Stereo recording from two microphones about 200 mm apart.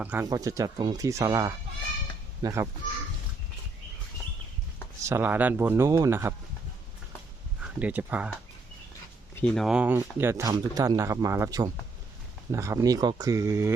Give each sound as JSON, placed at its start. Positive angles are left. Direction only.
{"t": 0.0, "sound": "speech", "side_deg": -5}
{"t": 5.0, "sound": "speech", "side_deg": -10}
{"t": 7.6, "sound": "speech", "side_deg": -5}
{"t": 9.4, "sound": "speech", "side_deg": 5}